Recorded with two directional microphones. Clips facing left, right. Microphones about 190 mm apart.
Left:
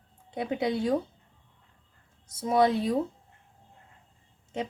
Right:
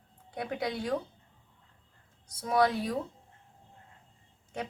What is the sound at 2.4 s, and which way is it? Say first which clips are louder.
Speech: left 3 dB; 25° left (ahead or behind).